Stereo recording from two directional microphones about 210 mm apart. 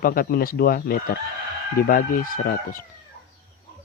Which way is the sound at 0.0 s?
45° left (ahead or behind).